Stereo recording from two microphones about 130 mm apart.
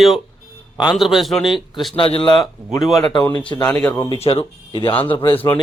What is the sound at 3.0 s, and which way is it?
Speech, 30° left (ahead or behind).